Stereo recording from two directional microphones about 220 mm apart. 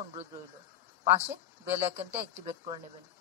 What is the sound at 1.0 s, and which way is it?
Speech, 30° right (ahead or behind).